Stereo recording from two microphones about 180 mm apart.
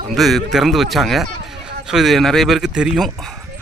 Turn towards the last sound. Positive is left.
turn(degrees=0)  # may be behind; listen again after turning